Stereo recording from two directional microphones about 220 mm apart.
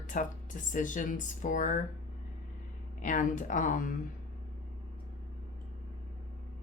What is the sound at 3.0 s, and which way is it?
Speech, 35° left (ahead or behind).